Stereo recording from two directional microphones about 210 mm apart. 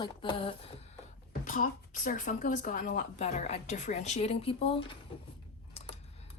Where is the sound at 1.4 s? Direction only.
40° left (ahead or behind).